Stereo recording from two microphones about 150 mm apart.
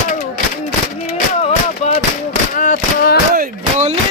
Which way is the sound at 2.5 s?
65° left (ahead or behind).